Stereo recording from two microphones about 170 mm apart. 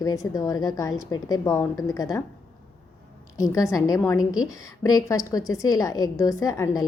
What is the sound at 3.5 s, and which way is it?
A woman's voice, 20° left (ahead or behind).